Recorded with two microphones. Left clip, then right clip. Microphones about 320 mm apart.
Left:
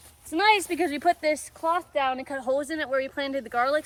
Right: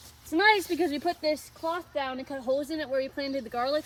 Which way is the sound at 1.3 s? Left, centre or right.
Left.